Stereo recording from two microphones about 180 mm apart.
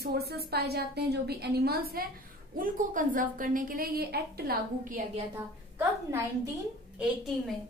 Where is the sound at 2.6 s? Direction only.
45° right (ahead or behind).